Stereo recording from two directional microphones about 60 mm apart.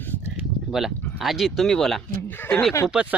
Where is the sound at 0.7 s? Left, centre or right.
Centre.